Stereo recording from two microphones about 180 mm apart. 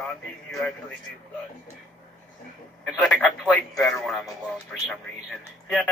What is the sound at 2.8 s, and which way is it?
A man's voice, centre (ahead or behind).